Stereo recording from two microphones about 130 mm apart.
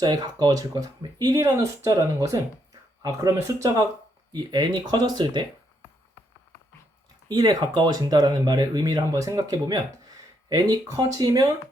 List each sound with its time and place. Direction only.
0.0 s speech: 35° right (ahead or behind)
7.3 s speech: 30° right (ahead or behind)